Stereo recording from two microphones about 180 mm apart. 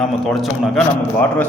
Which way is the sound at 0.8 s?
5° left (ahead or behind).